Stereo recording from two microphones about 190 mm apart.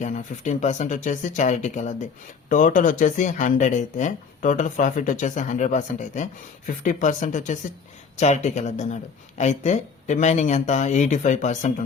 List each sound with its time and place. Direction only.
0.0 s speech: 40° left (ahead or behind)